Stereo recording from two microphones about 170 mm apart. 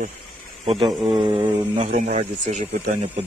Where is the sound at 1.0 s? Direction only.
30° right (ahead or behind).